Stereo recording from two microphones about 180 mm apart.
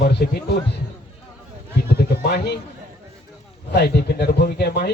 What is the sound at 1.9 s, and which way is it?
Speech, 60° left (ahead or behind).